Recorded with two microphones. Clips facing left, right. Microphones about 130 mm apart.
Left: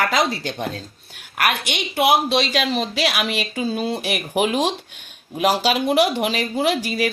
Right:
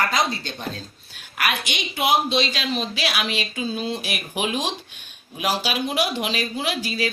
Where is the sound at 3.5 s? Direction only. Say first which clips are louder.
Left 4 dB; 55° left (ahead or behind).